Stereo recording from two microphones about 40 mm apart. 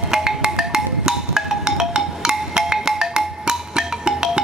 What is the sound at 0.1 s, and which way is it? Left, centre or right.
Music, centre.